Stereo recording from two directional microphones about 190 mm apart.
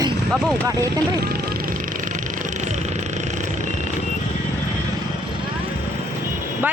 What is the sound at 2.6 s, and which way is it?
Vehicle, 40° right (ahead or behind).